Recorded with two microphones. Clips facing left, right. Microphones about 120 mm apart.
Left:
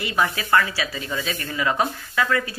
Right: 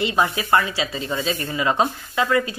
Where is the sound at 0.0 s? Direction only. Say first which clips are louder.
Right 3 dB; 25° right (ahead or behind).